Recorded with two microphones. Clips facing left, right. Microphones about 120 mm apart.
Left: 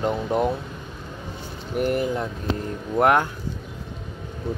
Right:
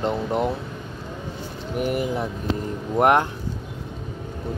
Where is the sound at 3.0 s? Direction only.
25° right (ahead or behind).